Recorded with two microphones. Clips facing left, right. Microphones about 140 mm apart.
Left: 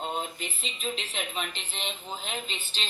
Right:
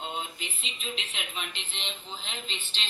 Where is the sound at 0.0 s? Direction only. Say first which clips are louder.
Left 3 dB; 45° left (ahead or behind).